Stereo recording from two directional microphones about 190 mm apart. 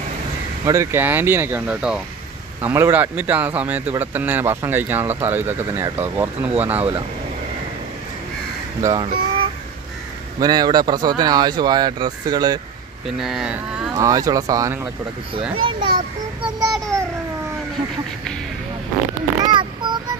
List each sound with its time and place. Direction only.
0.7 s speech: 15° right (ahead or behind)
8.8 s speech: 20° right (ahead or behind)
13.2 s speech: 5° right (ahead or behind)
13.9 s speech: 20° right (ahead or behind)
19.5 s a sound: 25° right (ahead or behind)